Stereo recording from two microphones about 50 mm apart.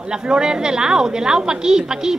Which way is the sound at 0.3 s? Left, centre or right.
Centre.